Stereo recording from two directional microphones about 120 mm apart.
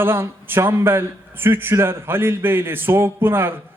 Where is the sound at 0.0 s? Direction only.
20° right (ahead or behind).